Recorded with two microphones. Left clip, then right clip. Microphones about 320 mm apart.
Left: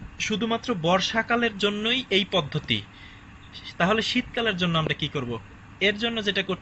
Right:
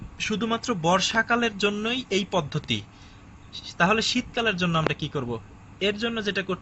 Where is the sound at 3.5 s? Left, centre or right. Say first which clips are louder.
Right 2 dB; right.